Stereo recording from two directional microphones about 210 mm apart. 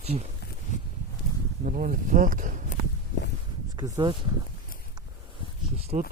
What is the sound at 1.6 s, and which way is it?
Speech, 40° right (ahead or behind).